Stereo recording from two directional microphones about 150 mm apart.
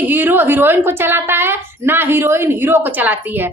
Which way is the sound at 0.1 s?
15° right (ahead or behind).